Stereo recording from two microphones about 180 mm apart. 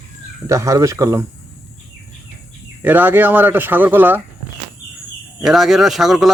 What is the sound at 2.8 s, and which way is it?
Speech, 10° right (ahead or behind).